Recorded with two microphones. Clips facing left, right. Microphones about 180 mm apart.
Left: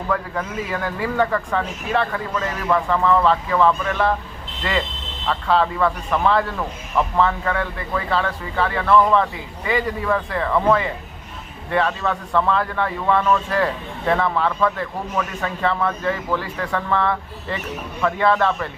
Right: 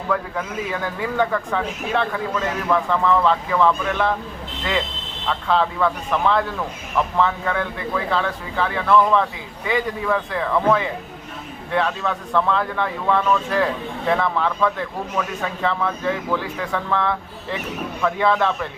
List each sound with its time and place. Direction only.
0.1 s a man's voice: centre (ahead or behind)
5.3 s a man's voice: 5° left (ahead or behind)